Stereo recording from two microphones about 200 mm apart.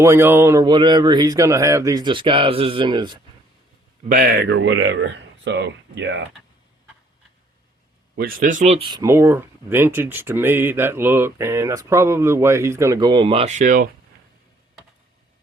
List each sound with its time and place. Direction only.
0.0 s speech: 15° right (ahead or behind)
4.1 s speech: 50° right (ahead or behind)
8.1 s speech: 50° right (ahead or behind)